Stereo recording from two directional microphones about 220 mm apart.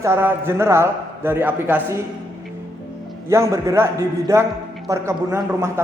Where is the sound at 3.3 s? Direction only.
15° right (ahead or behind).